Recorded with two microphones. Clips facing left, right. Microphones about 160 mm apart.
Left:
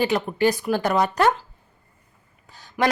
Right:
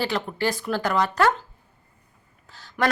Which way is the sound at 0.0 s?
15° left (ahead or behind).